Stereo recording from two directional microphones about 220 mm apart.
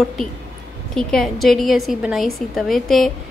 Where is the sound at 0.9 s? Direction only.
Centre (ahead or behind).